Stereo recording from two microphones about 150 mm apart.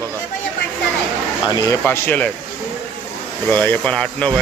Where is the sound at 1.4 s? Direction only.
25° left (ahead or behind).